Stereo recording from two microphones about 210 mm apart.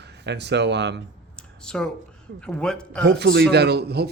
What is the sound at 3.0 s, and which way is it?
Speech, 55° right (ahead or behind).